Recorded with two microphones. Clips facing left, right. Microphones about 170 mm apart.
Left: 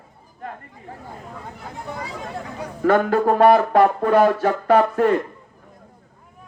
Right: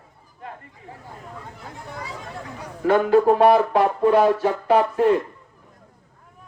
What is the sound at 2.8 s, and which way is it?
Speech, 50° left (ahead or behind).